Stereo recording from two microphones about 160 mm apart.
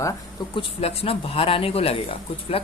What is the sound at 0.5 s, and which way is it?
Speech, 35° left (ahead or behind).